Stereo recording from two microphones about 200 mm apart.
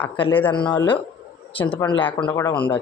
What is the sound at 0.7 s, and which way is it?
Speech, 25° left (ahead or behind).